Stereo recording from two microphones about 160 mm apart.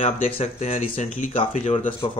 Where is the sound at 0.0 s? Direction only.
40° left (ahead or behind).